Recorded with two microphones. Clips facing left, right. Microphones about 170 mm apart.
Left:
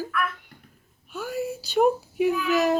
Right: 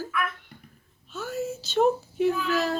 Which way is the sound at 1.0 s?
10° left (ahead or behind).